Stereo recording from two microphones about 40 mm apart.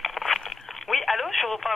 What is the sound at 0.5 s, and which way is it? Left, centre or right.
Telephone, centre.